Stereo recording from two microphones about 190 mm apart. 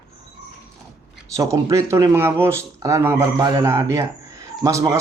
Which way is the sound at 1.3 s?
15° right (ahead or behind).